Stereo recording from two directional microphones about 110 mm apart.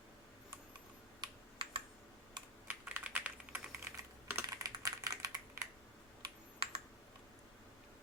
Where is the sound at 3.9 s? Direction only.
25° right (ahead or behind).